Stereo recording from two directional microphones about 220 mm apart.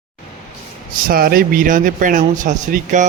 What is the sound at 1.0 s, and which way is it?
A man's voice, 40° right (ahead or behind).